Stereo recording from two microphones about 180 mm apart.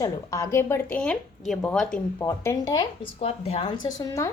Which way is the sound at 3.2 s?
35° left (ahead or behind).